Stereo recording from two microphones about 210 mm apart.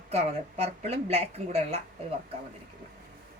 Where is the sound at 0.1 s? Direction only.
30° right (ahead or behind).